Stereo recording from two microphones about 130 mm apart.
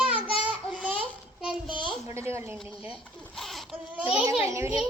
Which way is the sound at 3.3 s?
Centre (ahead or behind).